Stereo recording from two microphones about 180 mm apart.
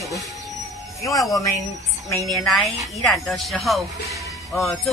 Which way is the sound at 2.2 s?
Centre (ahead or behind).